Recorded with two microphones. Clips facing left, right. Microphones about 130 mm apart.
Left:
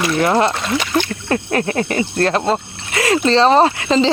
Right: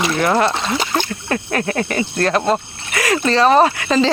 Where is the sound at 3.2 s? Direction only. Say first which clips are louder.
Even; 25° left (ahead or behind).